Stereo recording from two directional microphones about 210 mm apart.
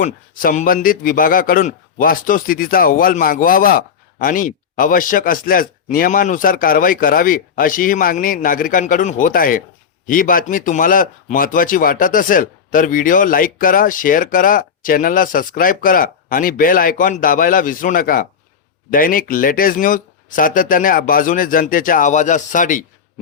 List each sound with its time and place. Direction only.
0.0 s a man's voice: 40° left (ahead or behind)